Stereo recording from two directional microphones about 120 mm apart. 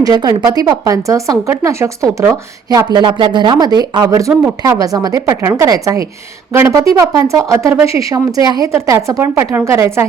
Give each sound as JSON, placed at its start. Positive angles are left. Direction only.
{"t": 0.0, "sound": "a woman's voice", "side_deg": -35}
{"t": 2.6, "sound": "a woman's voice", "side_deg": -35}